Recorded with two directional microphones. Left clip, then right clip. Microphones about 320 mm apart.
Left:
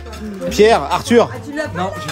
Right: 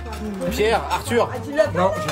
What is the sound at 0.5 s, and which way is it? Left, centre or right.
Speech, left.